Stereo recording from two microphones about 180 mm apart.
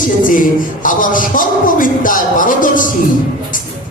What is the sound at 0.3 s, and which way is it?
A man's voice, 50° left (ahead or behind).